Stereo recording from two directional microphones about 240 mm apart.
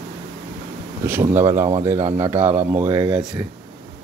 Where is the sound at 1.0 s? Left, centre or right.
Centre.